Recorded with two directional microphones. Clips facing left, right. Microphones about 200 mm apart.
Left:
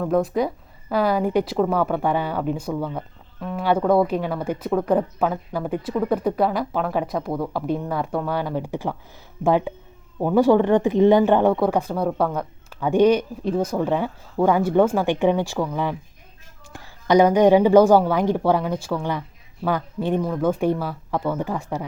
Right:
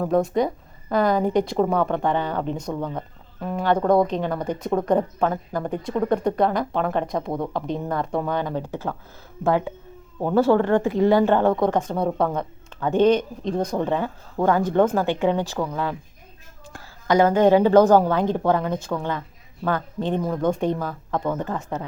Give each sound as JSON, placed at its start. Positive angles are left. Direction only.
{"t": 0.0, "sound": "speech", "side_deg": 0}